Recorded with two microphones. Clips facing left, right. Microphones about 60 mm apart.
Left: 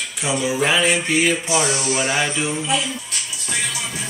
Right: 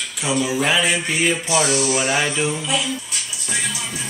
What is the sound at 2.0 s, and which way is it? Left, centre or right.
Music, centre.